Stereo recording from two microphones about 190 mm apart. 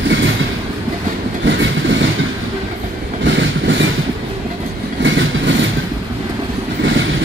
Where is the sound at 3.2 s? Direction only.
75° right (ahead or behind).